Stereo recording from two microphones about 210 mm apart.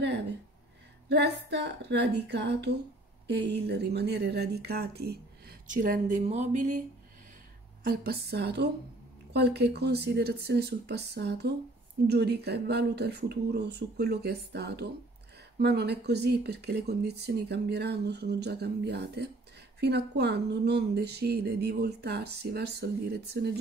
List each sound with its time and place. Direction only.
1.0 s speech: 50° right (ahead or behind); by 6.8 s 35° right (ahead or behind)
7.8 s speech: 45° right (ahead or behind)